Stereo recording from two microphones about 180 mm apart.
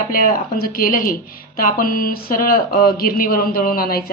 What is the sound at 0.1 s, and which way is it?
Speech, 55° left (ahead or behind).